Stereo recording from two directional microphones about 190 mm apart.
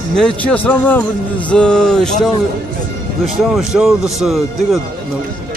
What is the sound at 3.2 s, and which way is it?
Speech, centre (ahead or behind).